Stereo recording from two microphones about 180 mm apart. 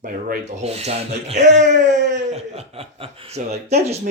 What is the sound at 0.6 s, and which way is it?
Speech, 35° right (ahead or behind).